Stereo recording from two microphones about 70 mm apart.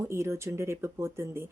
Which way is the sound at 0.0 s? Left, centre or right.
Right.